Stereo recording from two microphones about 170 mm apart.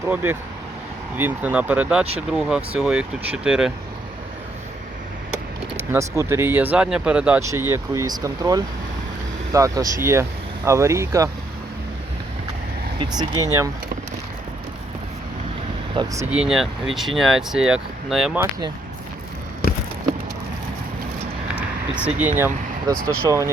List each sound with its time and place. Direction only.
0.0 s speech: 15° right (ahead or behind)
5.7 s speech: 15° right (ahead or behind)
13.0 s speech: 25° right (ahead or behind)
16.0 s speech: 30° right (ahead or behind)
16.3 s speech: 5° right (ahead or behind)
21.9 s speech: 10° right (ahead or behind)